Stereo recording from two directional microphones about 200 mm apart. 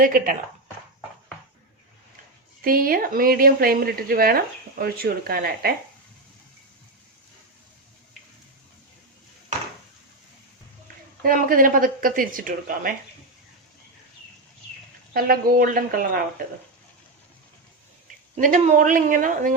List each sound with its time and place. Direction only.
0.0 s speech: 45° right (ahead or behind)
2.6 s speech: 45° right (ahead or behind)
11.2 s speech: 45° right (ahead or behind)
15.1 s speech: 50° right (ahead or behind)
18.3 s speech: 40° right (ahead or behind)